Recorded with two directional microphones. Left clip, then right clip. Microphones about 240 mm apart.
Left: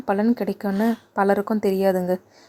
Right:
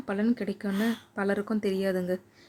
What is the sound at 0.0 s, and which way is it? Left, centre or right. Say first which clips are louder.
Speech: left 8 dB; centre.